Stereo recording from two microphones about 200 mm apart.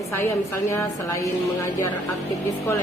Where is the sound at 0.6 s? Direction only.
15° left (ahead or behind).